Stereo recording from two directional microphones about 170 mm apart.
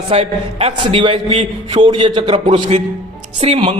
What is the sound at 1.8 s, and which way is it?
A man's voice, 30° right (ahead or behind).